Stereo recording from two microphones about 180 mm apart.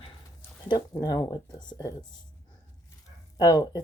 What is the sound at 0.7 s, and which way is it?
Speech, 20° left (ahead or behind).